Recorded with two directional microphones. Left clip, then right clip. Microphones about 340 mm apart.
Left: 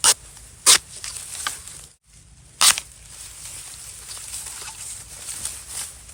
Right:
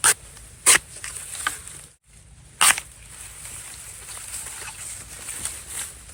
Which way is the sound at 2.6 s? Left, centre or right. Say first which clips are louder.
Left 1 dB; centre.